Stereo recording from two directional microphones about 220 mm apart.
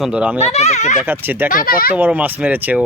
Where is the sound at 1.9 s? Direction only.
10° right (ahead or behind).